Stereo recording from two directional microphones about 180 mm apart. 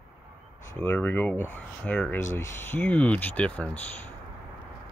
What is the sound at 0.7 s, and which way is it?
Speech, 10° left (ahead or behind).